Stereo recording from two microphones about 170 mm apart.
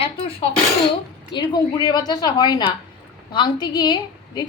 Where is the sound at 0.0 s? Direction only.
35° left (ahead or behind).